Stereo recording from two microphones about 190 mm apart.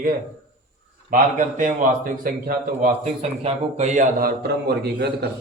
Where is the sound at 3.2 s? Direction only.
35° right (ahead or behind).